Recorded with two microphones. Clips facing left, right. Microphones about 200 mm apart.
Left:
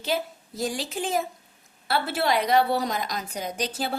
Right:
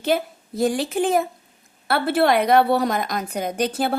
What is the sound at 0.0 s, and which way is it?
A woman's voice, 55° right (ahead or behind).